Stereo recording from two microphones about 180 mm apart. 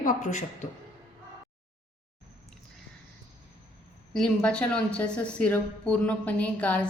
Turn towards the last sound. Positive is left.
turn(degrees=10)  # may be behind; listen again after turning